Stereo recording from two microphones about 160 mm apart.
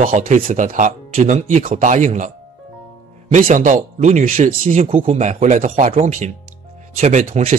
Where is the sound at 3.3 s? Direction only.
55° right (ahead or behind).